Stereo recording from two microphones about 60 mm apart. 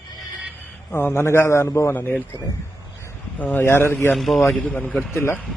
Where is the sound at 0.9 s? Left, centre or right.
Left.